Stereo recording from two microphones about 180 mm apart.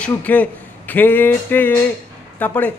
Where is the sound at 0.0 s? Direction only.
10° left (ahead or behind).